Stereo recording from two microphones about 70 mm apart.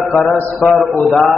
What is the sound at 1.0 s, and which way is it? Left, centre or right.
Speech, centre.